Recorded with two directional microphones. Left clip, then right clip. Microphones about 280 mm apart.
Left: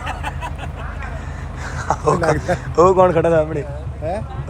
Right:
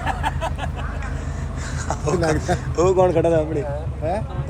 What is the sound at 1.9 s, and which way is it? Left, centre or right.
A man's voice, centre.